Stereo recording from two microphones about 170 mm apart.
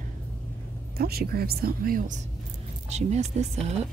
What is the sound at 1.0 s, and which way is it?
Speech, 65° right (ahead or behind).